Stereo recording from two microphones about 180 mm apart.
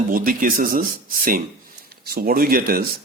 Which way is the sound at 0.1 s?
50° right (ahead or behind).